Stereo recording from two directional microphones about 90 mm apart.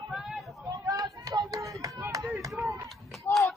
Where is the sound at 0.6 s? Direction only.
40° right (ahead or behind).